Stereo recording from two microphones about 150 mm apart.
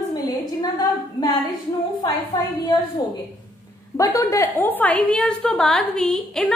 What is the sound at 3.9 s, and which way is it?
A woman's voice, 20° left (ahead or behind).